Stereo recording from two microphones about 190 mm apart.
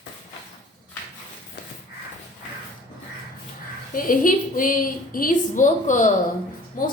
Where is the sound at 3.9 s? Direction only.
45° left (ahead or behind).